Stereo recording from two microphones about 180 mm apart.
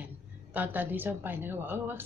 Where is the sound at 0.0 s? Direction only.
10° right (ahead or behind).